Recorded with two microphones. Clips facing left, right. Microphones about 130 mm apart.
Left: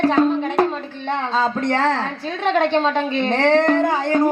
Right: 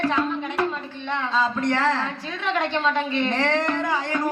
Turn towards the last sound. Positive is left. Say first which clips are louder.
# left 7 dB
turn(degrees=35)  # may be behind; listen again after turning